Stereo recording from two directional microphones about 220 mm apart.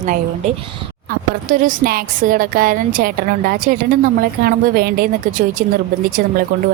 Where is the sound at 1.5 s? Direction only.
40° right (ahead or behind).